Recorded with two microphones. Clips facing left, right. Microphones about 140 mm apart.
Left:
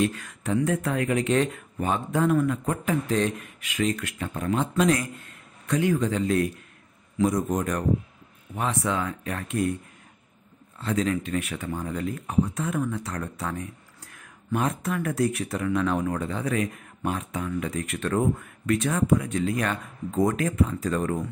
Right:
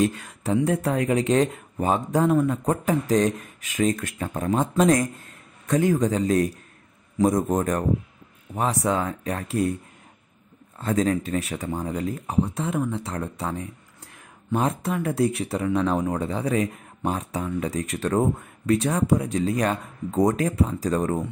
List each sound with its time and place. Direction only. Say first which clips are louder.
0.0 s a man's voice: right 2 dB; 35° right (ahead or behind)
10.8 s speech: right 3 dB; 45° right (ahead or behind)